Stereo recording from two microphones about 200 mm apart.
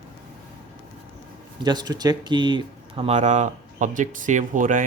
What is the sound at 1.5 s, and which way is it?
Speech, 20° right (ahead or behind).